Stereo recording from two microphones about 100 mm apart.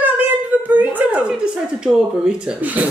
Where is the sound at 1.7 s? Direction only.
10° right (ahead or behind).